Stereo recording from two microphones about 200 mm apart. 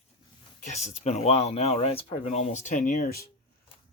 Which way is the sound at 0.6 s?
35° left (ahead or behind).